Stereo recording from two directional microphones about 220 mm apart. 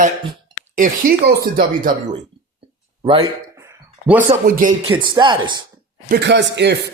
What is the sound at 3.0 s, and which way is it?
Speech, 20° right (ahead or behind).